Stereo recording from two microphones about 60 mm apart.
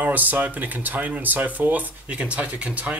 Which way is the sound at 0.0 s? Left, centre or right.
Right.